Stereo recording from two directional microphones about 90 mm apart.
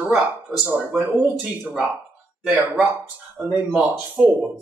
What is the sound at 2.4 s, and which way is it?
Speech, 15° right (ahead or behind).